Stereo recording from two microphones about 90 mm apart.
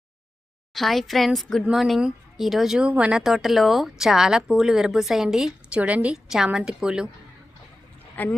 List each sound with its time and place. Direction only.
0.7 s a woman's voice: centre (ahead or behind)
5.7 s a woman's voice: 15° right (ahead or behind)
8.1 s speech: 20° left (ahead or behind)